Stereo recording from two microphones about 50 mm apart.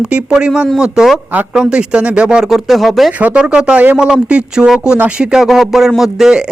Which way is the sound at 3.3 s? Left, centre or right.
Centre.